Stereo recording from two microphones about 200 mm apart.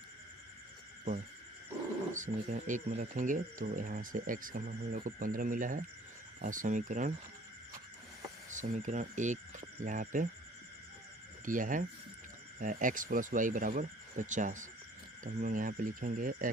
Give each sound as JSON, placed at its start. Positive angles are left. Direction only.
{"t": 2.1, "sound": "speech", "side_deg": -40}
{"t": 8.5, "sound": "speech", "side_deg": -40}
{"t": 11.4, "sound": "speech", "side_deg": -40}